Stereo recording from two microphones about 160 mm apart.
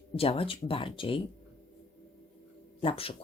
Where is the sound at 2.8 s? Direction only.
35° left (ahead or behind).